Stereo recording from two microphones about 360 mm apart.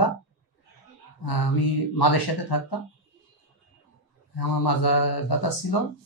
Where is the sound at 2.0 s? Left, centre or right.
Left.